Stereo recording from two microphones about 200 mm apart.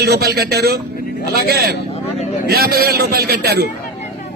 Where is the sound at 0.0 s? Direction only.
50° right (ahead or behind).